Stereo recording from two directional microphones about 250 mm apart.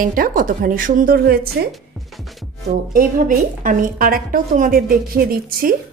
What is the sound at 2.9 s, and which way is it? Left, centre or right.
A woman's voice, right.